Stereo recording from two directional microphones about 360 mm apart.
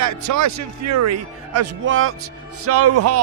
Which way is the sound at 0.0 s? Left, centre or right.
Right.